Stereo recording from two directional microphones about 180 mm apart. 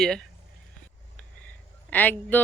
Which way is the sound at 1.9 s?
10° left (ahead or behind).